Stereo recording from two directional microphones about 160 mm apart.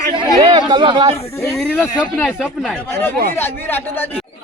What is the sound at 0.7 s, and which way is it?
Speech, 30° right (ahead or behind).